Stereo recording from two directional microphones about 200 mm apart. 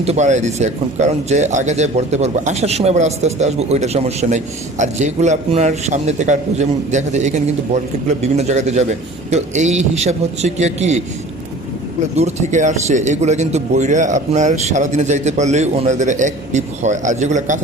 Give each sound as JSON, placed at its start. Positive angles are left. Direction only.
{"t": 0.0, "sound": "speech", "side_deg": -35}
{"t": 12.1, "sound": "speech", "side_deg": -35}